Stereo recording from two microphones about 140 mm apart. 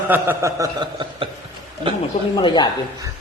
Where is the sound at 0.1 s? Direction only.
20° right (ahead or behind).